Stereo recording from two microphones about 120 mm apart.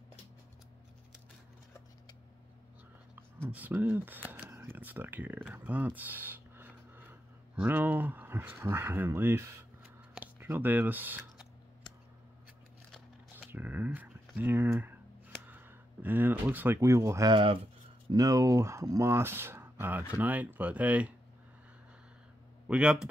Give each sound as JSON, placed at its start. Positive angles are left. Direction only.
{"t": 3.4, "sound": "speech", "side_deg": -15}
{"t": 13.4, "sound": "speech", "side_deg": -15}
{"t": 17.3, "sound": "speech", "side_deg": -45}
{"t": 18.1, "sound": "speech", "side_deg": -30}
{"t": 22.7, "sound": "speech", "side_deg": -5}